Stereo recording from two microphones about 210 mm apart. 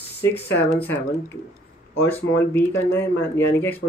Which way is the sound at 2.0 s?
10° left (ahead or behind).